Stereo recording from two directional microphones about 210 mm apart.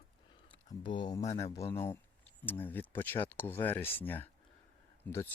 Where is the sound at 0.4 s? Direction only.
25° left (ahead or behind).